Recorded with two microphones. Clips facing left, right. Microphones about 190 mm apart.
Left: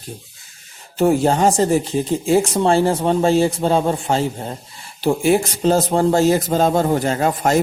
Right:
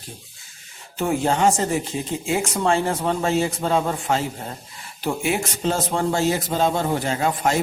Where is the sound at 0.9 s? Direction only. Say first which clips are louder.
Left 6 dB; 35° left (ahead or behind).